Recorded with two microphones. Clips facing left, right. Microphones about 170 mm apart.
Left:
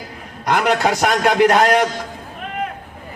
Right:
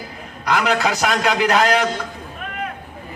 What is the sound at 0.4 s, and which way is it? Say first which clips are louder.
A man's voice: left 2 dB; 50° left (ahead or behind).